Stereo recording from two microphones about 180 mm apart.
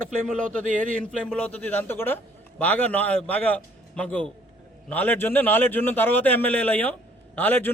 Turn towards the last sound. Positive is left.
turn(degrees=10)  # may be behind; listen again after turning